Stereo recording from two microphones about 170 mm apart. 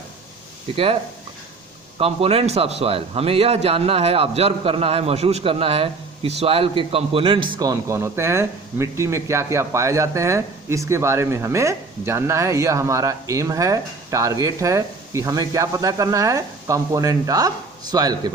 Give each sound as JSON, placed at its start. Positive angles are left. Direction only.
{"t": 2.0, "sound": "a man's voice", "side_deg": -35}